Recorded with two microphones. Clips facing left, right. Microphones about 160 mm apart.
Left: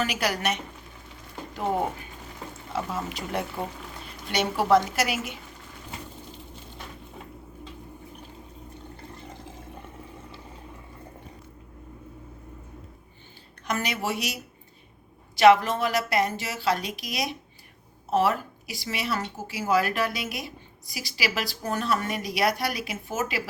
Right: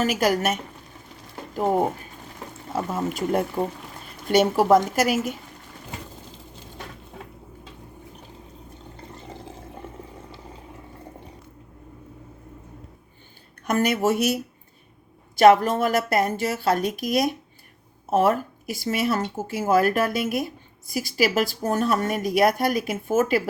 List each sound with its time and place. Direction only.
0.0 s speech: 45° right (ahead or behind)
2.7 s speech: 45° right (ahead or behind)
13.7 s speech: 50° right (ahead or behind)
15.4 s speech: 50° right (ahead or behind)